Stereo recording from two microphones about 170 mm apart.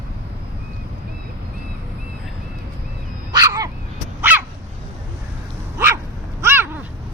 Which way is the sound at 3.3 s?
20° right (ahead or behind).